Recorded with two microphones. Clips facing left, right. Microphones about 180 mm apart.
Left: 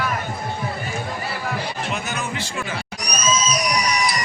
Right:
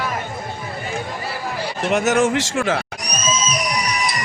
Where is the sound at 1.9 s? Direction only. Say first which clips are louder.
Right 11 dB; 75° right (ahead or behind).